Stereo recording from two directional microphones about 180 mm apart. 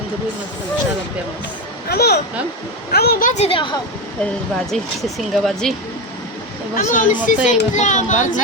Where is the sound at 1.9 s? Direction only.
65° left (ahead or behind); by 3.8 s 30° left (ahead or behind).